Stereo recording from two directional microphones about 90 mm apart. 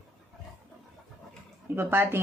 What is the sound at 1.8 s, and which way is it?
Speech, 25° right (ahead or behind).